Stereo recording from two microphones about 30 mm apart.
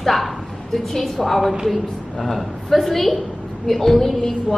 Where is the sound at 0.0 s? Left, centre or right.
Centre.